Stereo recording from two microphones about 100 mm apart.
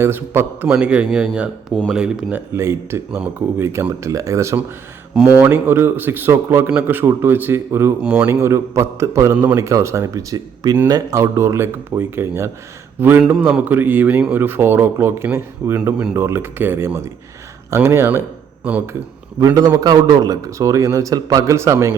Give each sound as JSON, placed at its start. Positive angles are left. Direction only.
{"t": 0.0, "sound": "speech", "side_deg": -20}
{"t": 0.7, "sound": "speech", "side_deg": -10}
{"t": 2.3, "sound": "speech", "side_deg": -25}
{"t": 8.0, "sound": "speech", "side_deg": -10}
{"t": 8.3, "sound": "speech", "side_deg": -30}
{"t": 19.5, "sound": "speech", "side_deg": -35}